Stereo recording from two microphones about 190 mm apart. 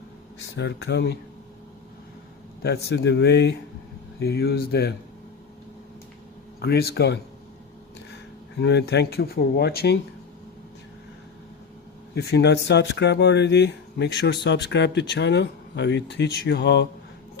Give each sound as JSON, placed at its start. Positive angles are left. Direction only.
{"t": 0.3, "sound": "speech", "side_deg": 70}
{"t": 2.6, "sound": "speech", "side_deg": 60}
{"t": 6.6, "sound": "speech", "side_deg": 55}
{"t": 8.6, "sound": "speech", "side_deg": 65}
{"t": 12.1, "sound": "speech", "side_deg": 60}